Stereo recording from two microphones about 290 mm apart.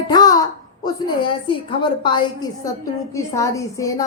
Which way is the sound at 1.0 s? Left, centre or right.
Centre.